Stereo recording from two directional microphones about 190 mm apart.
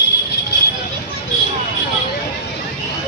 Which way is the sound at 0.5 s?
60° left (ahead or behind).